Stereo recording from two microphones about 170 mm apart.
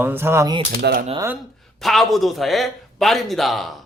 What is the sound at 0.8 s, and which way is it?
Speech, 70° right (ahead or behind).